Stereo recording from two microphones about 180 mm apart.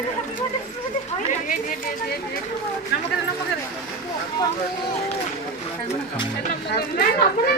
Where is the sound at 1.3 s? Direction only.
45° left (ahead or behind).